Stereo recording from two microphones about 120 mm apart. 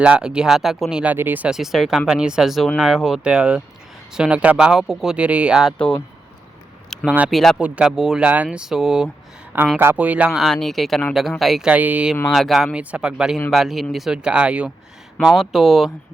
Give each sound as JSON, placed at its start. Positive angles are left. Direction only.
{"t": 0.0, "sound": "speech", "side_deg": -10}
{"t": 5.7, "sound": "speech", "side_deg": 10}
{"t": 6.9, "sound": "speech", "side_deg": -5}
{"t": 12.3, "sound": "speech", "side_deg": 0}